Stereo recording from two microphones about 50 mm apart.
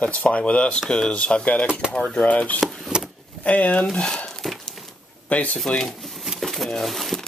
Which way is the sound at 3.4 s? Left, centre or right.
Left.